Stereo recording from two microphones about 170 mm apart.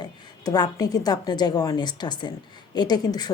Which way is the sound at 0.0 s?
20° left (ahead or behind).